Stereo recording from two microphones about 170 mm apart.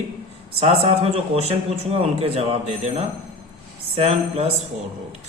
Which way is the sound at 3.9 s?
35° right (ahead or behind).